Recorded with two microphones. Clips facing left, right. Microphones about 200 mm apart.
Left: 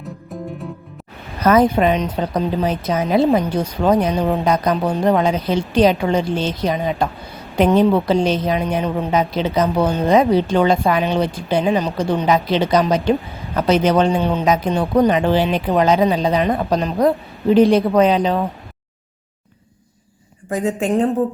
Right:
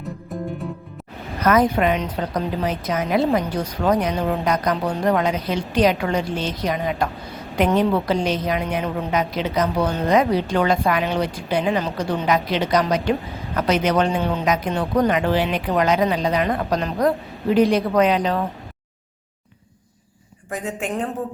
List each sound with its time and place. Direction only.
0.0 s music: centre (ahead or behind)
1.5 s a woman's voice: 30° left (ahead or behind)
20.5 s a woman's voice: 30° left (ahead or behind)